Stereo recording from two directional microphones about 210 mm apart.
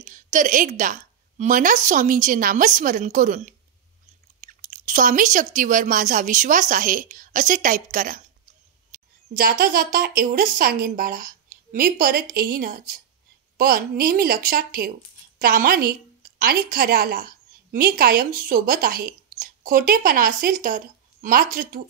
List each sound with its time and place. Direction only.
0.0 s a woman's voice: 35° right (ahead or behind)